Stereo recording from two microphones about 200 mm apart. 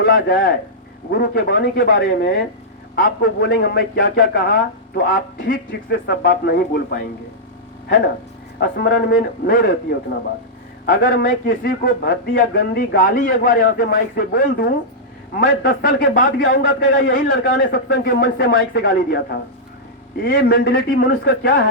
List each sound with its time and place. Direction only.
0.0 s a man's voice: 45° left (ahead or behind)
8.5 s a man's voice: 50° left (ahead or behind)
10.8 s a man's voice: 45° left (ahead or behind)
17.6 s a man's voice: 55° left (ahead or behind)